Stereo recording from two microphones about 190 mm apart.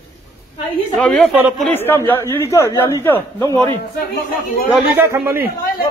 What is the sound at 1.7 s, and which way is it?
Speech, 10° left (ahead or behind).